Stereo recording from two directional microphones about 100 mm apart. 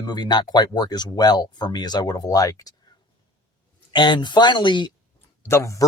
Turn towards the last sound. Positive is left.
turn(degrees=30)  # may be behind; listen again after turning